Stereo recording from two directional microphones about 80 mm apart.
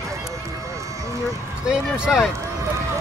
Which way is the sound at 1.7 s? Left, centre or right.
Centre.